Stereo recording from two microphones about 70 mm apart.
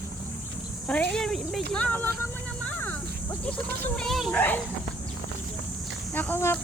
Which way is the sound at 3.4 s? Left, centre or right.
Centre.